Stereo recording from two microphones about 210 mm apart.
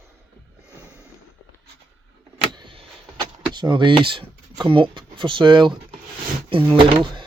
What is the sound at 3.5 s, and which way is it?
Speech, 20° right (ahead or behind).